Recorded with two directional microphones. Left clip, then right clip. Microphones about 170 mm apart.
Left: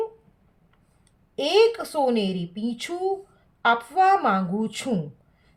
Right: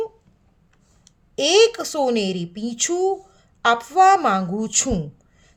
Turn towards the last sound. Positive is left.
turn(degrees=-45)  # may be behind; listen again after turning